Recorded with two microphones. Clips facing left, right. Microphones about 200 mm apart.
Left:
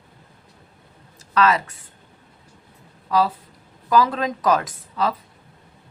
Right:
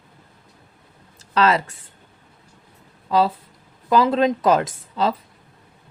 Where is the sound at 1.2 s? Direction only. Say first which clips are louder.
Right 1 dB; 30° right (ahead or behind).